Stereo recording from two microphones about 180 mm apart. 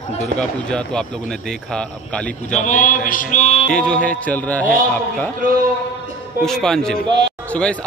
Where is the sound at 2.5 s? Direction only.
40° left (ahead or behind).